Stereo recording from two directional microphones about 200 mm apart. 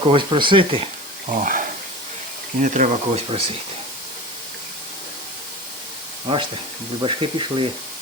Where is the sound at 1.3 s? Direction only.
40° right (ahead or behind).